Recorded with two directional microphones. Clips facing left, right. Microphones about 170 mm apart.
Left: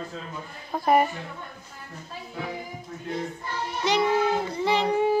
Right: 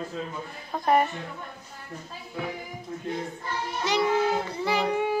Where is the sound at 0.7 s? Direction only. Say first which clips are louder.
Left 2 dB; 10° left (ahead or behind).